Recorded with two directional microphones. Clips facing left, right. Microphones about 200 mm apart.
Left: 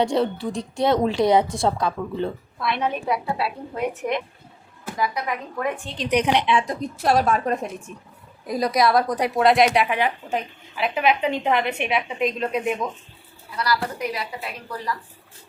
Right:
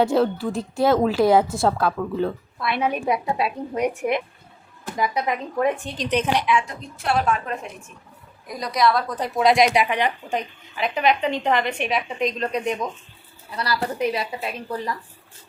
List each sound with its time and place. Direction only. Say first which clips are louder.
0.0 s a woman's voice: right 2 dB; 5° right (ahead or behind); by 5.2 s 20° right (ahead or behind)
6.0 s a woman's voice: left 4 dB; 10° left (ahead or behind)
6.5 s a woman's voice: left 1 dB; 35° left (ahead or behind)
8.4 s a woman's voice: left 1 dB; 25° left (ahead or behind); by 12.9 s 5° left (ahead or behind)
13.6 s speech: right 1 dB; 25° right (ahead or behind)